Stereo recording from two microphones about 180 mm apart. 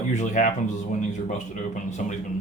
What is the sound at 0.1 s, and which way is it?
Speech, 40° left (ahead or behind).